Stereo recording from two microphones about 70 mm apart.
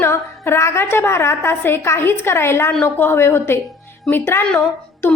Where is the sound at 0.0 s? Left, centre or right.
Left.